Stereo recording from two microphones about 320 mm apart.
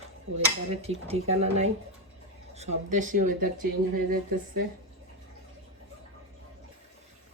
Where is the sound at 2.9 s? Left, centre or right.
Right.